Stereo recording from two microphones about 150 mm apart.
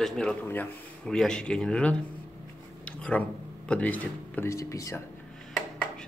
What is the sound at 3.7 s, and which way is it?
Speech, 10° left (ahead or behind).